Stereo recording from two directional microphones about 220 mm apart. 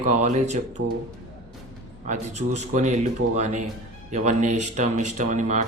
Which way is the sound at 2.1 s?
30° right (ahead or behind).